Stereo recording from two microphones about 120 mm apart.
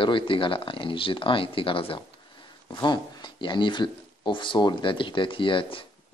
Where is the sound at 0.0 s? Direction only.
45° left (ahead or behind).